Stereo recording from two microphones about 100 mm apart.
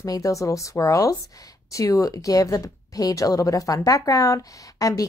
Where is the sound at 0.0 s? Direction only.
35° left (ahead or behind).